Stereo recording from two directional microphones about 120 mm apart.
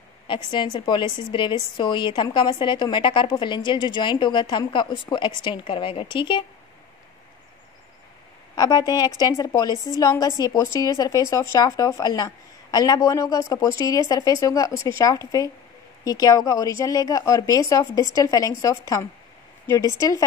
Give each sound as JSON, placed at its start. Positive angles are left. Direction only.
{"t": 0.5, "sound": "a woman's voice", "side_deg": 40}
{"t": 8.5, "sound": "a woman's voice", "side_deg": 35}
{"t": 20.0, "sound": "speech", "side_deg": 30}